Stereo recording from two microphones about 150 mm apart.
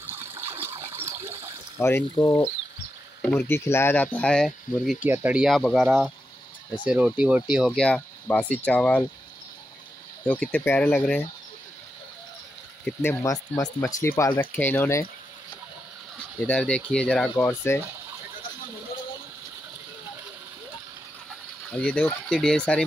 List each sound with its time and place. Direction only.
0.0 s water: 15° right (ahead or behind)
1.8 s speech: 15° left (ahead or behind)
3.2 s speech: 10° left (ahead or behind)
7.8 s speech: 10° left (ahead or behind)
10.2 s speech: 10° left (ahead or behind)
12.8 s speech: 15° left (ahead or behind)
16.4 s speech: 10° left (ahead or behind)
17.4 s speech: 15° left (ahead or behind)
21.6 s speech: 5° left (ahead or behind)